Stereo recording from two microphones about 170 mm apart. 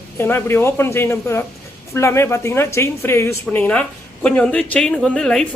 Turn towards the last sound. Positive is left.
turn(degrees=5)  # may be behind; listen again after turning